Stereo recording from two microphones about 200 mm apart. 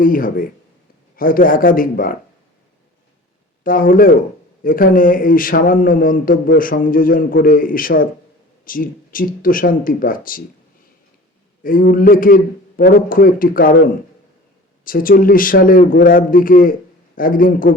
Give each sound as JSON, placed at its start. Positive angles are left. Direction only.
{"t": 0.0, "sound": "a man's voice", "side_deg": 45}
{"t": 3.6, "sound": "a man's voice", "side_deg": 45}
{"t": 11.6, "sound": "a man's voice", "side_deg": 45}
{"t": 14.8, "sound": "a man's voice", "side_deg": 45}